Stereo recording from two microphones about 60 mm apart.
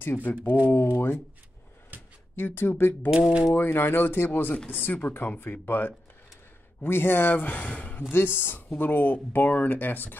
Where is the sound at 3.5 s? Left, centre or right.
Left.